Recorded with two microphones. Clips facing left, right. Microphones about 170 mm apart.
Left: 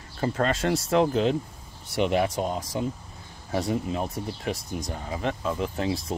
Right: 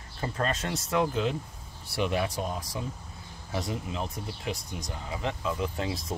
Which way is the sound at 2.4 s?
25° left (ahead or behind).